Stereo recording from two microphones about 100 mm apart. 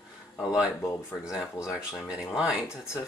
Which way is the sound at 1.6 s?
35° left (ahead or behind).